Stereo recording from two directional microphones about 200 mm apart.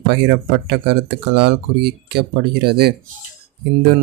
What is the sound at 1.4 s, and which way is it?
Speech, 55° right (ahead or behind).